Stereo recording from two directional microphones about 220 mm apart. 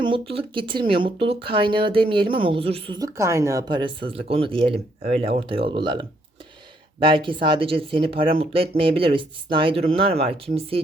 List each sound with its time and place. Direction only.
0.0 s speech: 25° right (ahead or behind)